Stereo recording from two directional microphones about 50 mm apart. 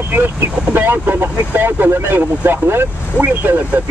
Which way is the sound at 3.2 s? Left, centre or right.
Right.